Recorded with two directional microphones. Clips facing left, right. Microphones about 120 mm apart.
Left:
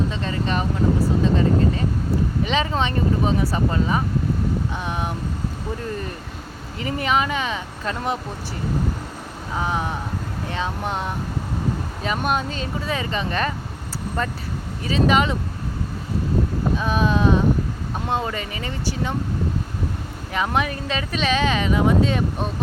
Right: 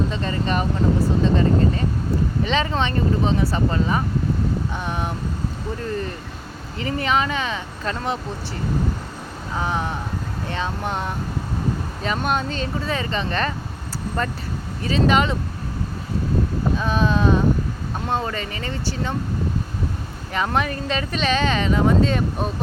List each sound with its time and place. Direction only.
0.1 s speech: centre (ahead or behind)
6.8 s speech: 5° left (ahead or behind)
9.6 s speech: 5° left (ahead or behind)
16.7 s speech: 5° left (ahead or behind)
20.3 s speech: 5° left (ahead or behind)